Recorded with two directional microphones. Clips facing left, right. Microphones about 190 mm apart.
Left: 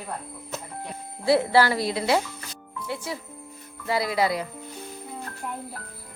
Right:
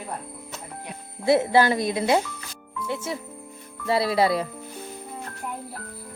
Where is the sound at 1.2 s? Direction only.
20° right (ahead or behind).